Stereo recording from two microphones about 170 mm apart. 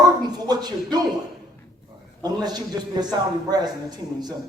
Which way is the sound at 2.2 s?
25° right (ahead or behind).